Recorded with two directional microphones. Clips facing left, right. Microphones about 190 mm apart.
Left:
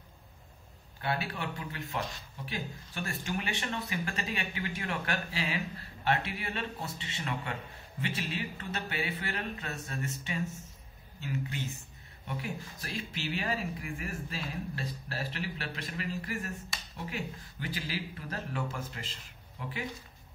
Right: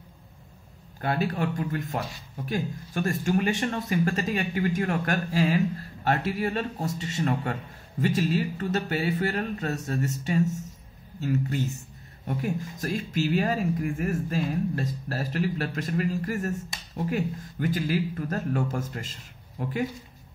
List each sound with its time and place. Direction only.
1.0 s speech: 45° right (ahead or behind)